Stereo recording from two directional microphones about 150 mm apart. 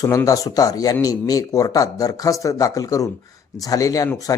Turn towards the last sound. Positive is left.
turn(degrees=20)  # may be behind; listen again after turning